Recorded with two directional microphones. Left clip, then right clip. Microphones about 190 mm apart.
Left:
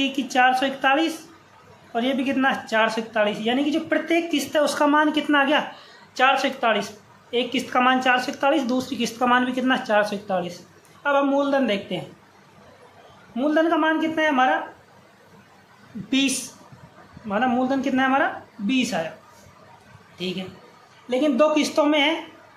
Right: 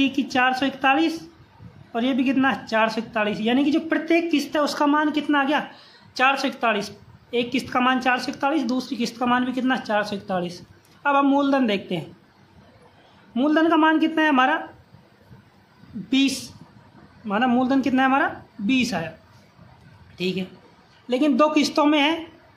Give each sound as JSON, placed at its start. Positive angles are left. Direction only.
{"t": 0.0, "sound": "speech", "side_deg": -25}
{"t": 13.3, "sound": "a woman's voice", "side_deg": -35}
{"t": 16.1, "sound": "speech", "side_deg": -20}
{"t": 17.3, "sound": "a woman's voice", "side_deg": -35}
{"t": 20.2, "sound": "a woman's voice", "side_deg": -30}